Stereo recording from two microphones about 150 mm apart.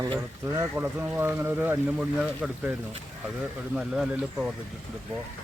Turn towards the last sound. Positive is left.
turn(degrees=-5)  # may be behind; listen again after turning